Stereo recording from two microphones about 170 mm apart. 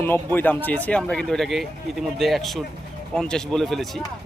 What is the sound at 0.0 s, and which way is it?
Speech, 10° left (ahead or behind).